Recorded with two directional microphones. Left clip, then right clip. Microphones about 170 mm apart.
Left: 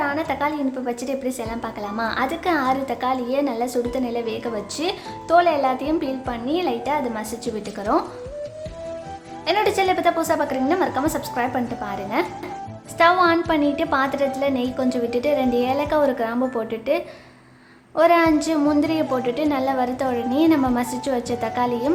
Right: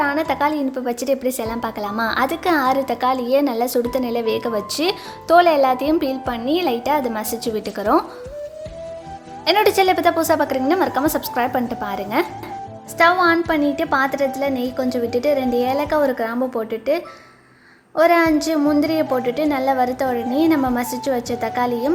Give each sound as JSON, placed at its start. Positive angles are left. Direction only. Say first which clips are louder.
{"t": 0.0, "sound": "a woman's voice", "louder": "right 4 dB", "side_deg": -35}
{"t": 9.5, "sound": "a woman's voice", "louder": "right 4 dB", "side_deg": -35}
{"t": 13.0, "sound": "a woman's voice", "louder": "right 1 dB", "side_deg": -20}